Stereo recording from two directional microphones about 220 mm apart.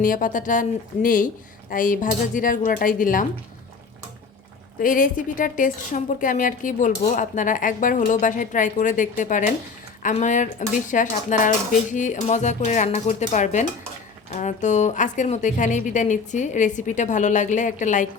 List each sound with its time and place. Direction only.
0.0 s a woman's voice: 40° left (ahead or behind)
4.8 s a woman's voice: 40° left (ahead or behind)